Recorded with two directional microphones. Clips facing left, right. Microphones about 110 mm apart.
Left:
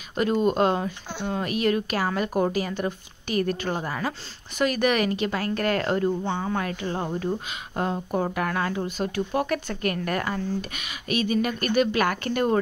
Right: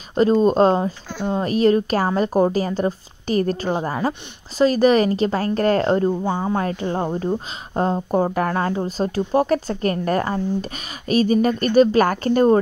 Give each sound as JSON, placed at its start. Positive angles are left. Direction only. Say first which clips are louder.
{"t": 0.1, "sound": "a woman's voice", "louder": "right 7 dB", "side_deg": -30}